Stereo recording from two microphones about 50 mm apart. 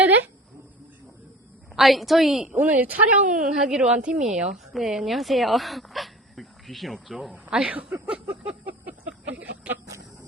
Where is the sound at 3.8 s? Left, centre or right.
Right.